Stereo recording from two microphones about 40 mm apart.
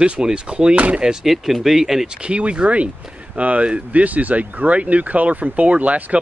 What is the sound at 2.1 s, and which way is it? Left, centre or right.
Speech, right.